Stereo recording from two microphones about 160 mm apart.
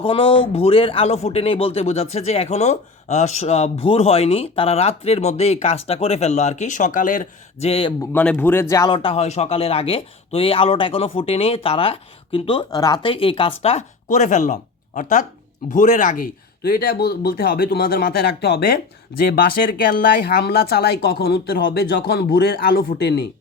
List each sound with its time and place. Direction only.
0.0 s speech: 35° left (ahead or behind); by 7.3 s 55° left (ahead or behind)
7.6 s speech: 35° left (ahead or behind)
8.1 s speech: 10° left (ahead or behind)
8.9 s speech: 35° left (ahead or behind); by 23.2 s 90° left